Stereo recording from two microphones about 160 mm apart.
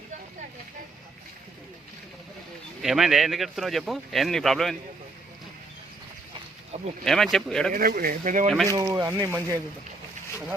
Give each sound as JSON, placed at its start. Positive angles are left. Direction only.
{"t": 2.8, "sound": "speech", "side_deg": 0}
{"t": 7.0, "sound": "speech", "side_deg": 0}
{"t": 7.7, "sound": "speech", "side_deg": -65}
{"t": 8.7, "sound": "speech", "side_deg": -20}